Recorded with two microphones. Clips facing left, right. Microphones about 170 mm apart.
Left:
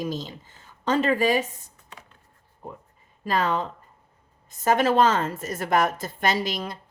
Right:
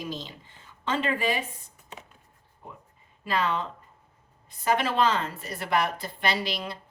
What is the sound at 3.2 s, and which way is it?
Speech, 45° left (ahead or behind).